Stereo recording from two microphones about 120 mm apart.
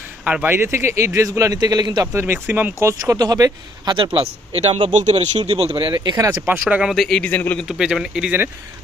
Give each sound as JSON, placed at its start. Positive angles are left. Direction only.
{"t": 0.3, "sound": "a man's voice", "side_deg": -15}
{"t": 2.1, "sound": "a man's voice", "side_deg": -20}
{"t": 3.9, "sound": "a man's voice", "side_deg": -45}
{"t": 4.9, "sound": "speech", "side_deg": -80}
{"t": 5.5, "sound": "speech", "side_deg": -60}
{"t": 6.5, "sound": "speech", "side_deg": -10}
{"t": 6.9, "sound": "a man's voice", "side_deg": 0}
{"t": 7.2, "sound": "a man's voice", "side_deg": 10}
{"t": 7.6, "sound": "a man's voice", "side_deg": -5}